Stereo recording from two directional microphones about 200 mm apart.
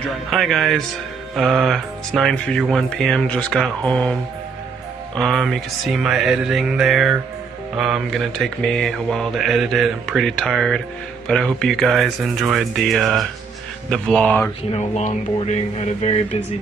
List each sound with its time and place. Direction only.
0.3 s mantra: centre (ahead or behind)
14.7 s speech: 35° left (ahead or behind)